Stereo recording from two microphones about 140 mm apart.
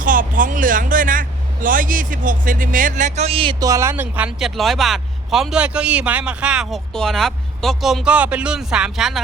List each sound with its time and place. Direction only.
0.0 s vehicle: 75° right (ahead or behind); by 3.5 s 45° right (ahead or behind)
3.6 s speech: 20° right (ahead or behind)
4.4 s a man's voice: centre (ahead or behind)